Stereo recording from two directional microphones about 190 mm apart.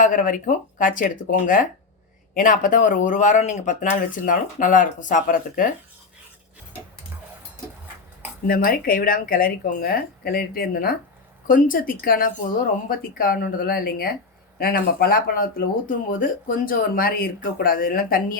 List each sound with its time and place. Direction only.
0.0 s speech: 45° left (ahead or behind)
8.4 s speech: 50° left (ahead or behind)